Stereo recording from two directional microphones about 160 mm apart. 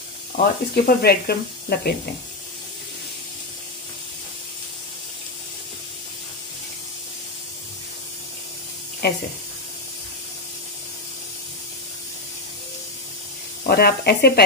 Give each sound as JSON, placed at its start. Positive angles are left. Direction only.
{"t": 0.4, "sound": "speech", "side_deg": 70}
{"t": 9.0, "sound": "speech", "side_deg": 85}
{"t": 13.7, "sound": "speech", "side_deg": 80}